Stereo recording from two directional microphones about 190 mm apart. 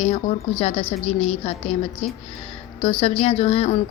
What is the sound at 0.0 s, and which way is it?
Speech, 30° left (ahead or behind).